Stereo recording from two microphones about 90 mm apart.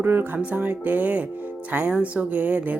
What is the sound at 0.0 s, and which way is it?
Speech, 25° right (ahead or behind).